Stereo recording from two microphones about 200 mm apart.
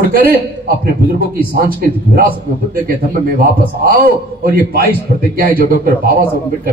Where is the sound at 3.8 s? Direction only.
50° right (ahead or behind).